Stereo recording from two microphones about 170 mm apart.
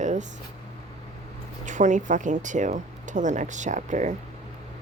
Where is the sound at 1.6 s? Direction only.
45° right (ahead or behind).